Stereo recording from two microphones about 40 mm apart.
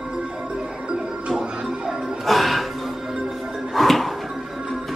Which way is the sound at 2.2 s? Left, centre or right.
Centre.